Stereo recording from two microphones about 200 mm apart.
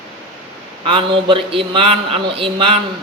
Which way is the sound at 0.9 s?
25° right (ahead or behind).